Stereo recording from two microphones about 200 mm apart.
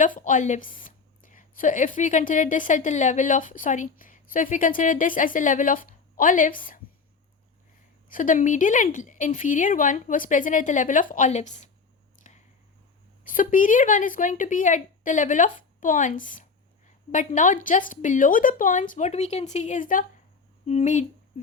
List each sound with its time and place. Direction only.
0.0 s a woman's voice: 40° left (ahead or behind)
8.1 s a woman's voice: 40° left (ahead or behind)
12.2 s squish: 35° left (ahead or behind)
13.2 s a woman's voice: 45° left (ahead or behind)